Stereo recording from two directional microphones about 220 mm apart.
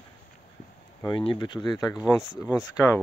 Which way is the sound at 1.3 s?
20° left (ahead or behind).